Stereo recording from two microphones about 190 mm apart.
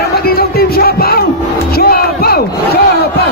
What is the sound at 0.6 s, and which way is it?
Music, 55° left (ahead or behind).